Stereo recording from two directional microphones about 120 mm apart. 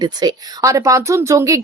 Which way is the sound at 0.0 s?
35° right (ahead or behind).